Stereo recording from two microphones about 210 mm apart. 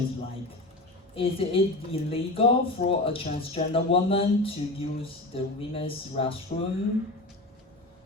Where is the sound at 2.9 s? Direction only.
25° left (ahead or behind).